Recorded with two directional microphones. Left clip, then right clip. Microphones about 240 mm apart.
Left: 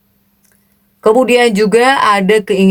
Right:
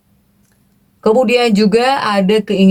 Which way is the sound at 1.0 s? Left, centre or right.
Left.